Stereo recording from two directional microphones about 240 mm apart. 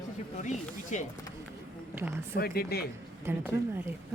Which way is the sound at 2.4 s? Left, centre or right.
Left.